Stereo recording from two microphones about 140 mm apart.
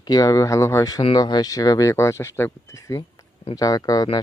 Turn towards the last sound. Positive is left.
turn(degrees=25)  # may be behind; listen again after turning